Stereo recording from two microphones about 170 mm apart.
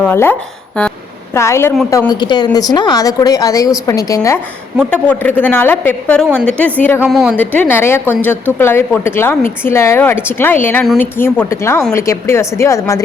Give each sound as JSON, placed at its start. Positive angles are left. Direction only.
{"t": 0.0, "sound": "a woman's voice", "side_deg": 10}
{"t": 4.9, "sound": "a woman's voice", "side_deg": 10}
{"t": 7.0, "sound": "a woman's voice", "side_deg": -5}
{"t": 7.3, "sound": "a woman's voice", "side_deg": 10}